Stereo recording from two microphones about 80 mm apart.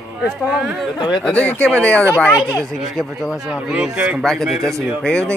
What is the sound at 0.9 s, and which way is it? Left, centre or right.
Speech, left.